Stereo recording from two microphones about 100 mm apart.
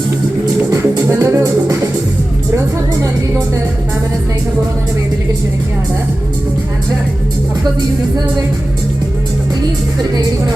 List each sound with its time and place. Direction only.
1.2 s music: 30° right (ahead or behind)